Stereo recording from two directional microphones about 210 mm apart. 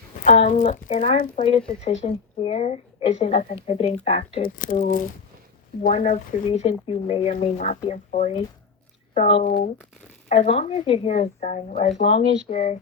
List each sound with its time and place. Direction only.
0.3 s speech: 35° left (ahead or behind)
9.5 s speech: 50° left (ahead or behind)
10.2 s speech: 30° left (ahead or behind)